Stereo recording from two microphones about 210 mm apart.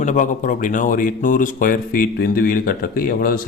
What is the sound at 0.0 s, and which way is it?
Speech, 35° left (ahead or behind).